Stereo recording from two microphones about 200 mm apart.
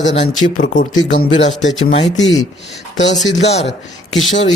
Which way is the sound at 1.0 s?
75° left (ahead or behind).